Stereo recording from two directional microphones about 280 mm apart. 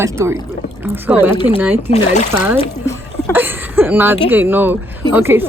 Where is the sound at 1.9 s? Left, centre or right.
Left.